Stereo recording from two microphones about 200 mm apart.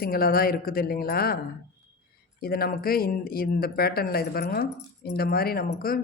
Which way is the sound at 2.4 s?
50° left (ahead or behind).